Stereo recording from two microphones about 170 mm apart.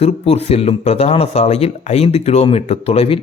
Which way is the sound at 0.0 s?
40° left (ahead or behind).